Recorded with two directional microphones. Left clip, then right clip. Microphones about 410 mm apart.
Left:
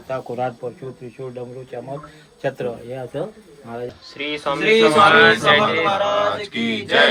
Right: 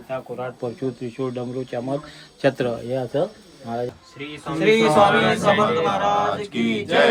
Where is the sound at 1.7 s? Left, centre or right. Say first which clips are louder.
Right 4 dB; centre.